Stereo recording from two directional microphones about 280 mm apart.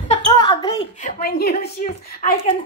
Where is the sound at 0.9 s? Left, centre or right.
Left.